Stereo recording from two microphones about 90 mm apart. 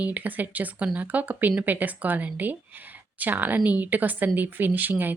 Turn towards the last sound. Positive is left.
turn(degrees=-20)  # may be behind; listen again after turning